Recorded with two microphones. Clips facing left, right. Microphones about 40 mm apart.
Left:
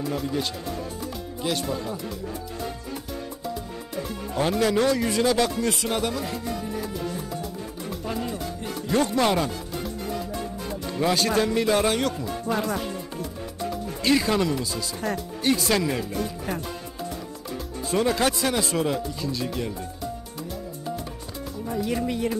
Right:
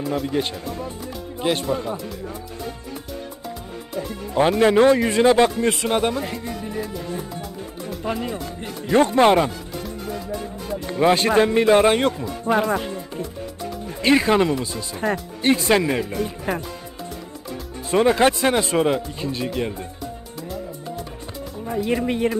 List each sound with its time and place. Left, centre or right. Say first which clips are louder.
0.0 s speech: right 4 dB; centre
0.3 s speech: right 4 dB; right
4.4 s speech: right 7 dB; right
8.0 s speech: right 4 dB; right
10.9 s speech: right 6 dB; right
14.0 s speech: right 5 dB; right
17.9 s speech: right 6 dB; right
21.6 s speech: right 4 dB; right